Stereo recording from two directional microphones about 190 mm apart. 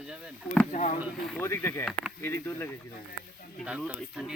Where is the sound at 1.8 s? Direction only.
Centre (ahead or behind).